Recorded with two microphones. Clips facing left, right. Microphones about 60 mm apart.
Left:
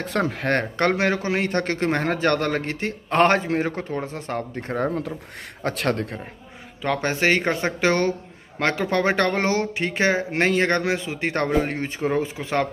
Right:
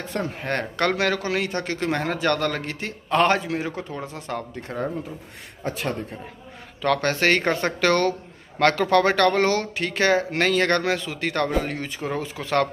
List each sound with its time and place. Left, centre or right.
0.1 s speech: left
0.7 s speech: left
1.5 s a man's voice: left
5.6 s a man's voice: left
6.8 s speech: centre